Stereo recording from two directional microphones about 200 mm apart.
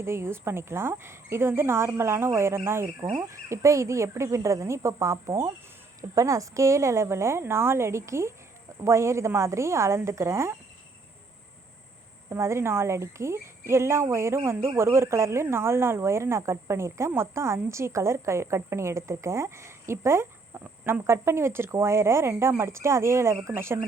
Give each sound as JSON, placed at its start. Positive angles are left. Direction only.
{"t": 0.0, "sound": "speech", "side_deg": -10}
{"t": 12.3, "sound": "speech", "side_deg": -15}